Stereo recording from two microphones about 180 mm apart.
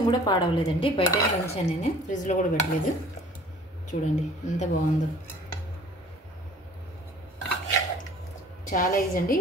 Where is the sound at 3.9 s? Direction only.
45° left (ahead or behind).